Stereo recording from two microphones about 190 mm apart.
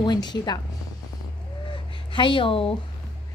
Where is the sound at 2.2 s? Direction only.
25° left (ahead or behind).